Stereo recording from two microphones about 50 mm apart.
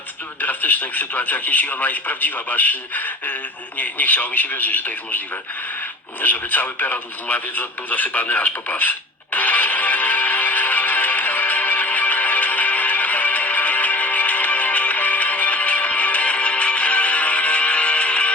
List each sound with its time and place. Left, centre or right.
0.4 s speech: left
6.2 s radio: left